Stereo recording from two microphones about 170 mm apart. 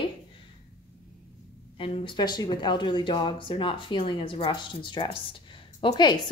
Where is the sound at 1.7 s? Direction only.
30° left (ahead or behind).